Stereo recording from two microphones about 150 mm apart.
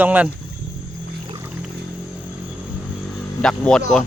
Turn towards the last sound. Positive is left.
turn(degrees=5)  # may be behind; listen again after turning